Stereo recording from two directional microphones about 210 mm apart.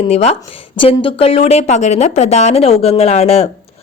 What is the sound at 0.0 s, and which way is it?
A man's voice, 30° left (ahead or behind).